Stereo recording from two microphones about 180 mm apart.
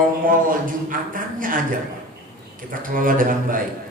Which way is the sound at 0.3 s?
50° right (ahead or behind).